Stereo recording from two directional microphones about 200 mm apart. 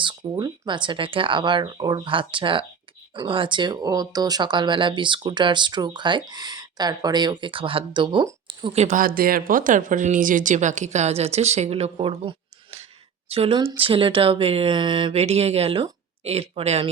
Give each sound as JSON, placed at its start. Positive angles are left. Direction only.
{"t": 0.0, "sound": "speech", "side_deg": -20}
{"t": 13.3, "sound": "speech", "side_deg": -30}